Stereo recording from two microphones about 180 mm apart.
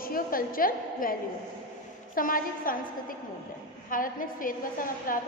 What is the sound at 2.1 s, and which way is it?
A woman's voice, 50° left (ahead or behind).